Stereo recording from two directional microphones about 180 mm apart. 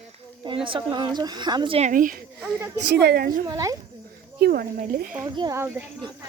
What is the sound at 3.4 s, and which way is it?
Speech, 20° right (ahead or behind).